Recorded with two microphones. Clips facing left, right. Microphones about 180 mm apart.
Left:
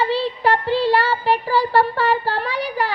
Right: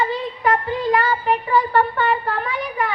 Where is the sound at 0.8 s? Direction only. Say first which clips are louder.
Right 2 dB; 30° left (ahead or behind).